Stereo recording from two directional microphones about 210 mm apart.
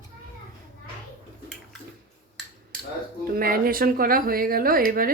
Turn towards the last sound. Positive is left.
turn(degrees=-40)  # may be behind; listen again after turning